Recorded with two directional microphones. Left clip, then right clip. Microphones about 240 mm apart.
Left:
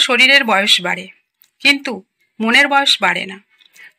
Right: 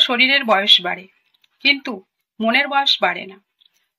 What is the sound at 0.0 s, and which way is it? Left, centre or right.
A woman's voice, left.